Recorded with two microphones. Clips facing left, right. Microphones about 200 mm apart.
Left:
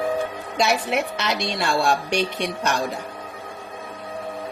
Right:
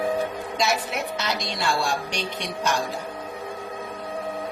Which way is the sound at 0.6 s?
65° left (ahead or behind).